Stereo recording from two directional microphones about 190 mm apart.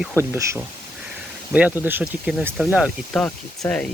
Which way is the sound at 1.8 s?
10° right (ahead or behind).